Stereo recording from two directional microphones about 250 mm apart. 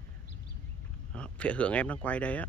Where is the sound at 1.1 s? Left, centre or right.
Centre.